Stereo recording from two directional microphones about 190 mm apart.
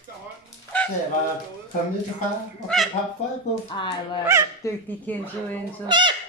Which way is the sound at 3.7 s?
25° left (ahead or behind).